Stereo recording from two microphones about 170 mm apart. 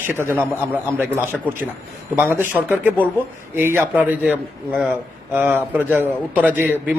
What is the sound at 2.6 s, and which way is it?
A man's voice, 10° right (ahead or behind).